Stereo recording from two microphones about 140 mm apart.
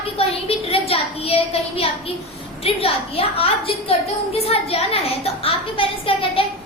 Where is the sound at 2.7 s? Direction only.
45° left (ahead or behind).